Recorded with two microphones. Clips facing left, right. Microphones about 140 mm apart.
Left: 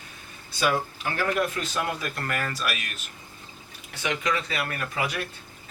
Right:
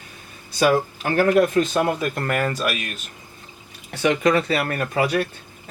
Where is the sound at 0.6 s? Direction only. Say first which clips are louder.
Right 7 dB; 50° right (ahead or behind).